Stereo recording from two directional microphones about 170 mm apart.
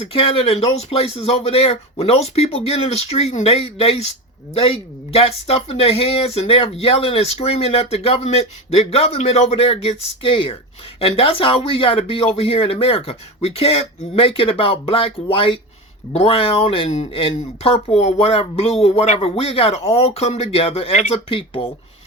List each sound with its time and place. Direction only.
0.0 s speech: 35° left (ahead or behind)